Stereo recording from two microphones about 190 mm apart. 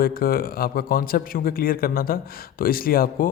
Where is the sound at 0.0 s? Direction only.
50° left (ahead or behind).